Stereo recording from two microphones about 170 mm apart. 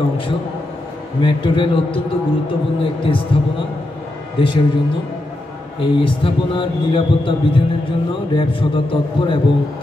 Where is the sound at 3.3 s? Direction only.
30° left (ahead or behind).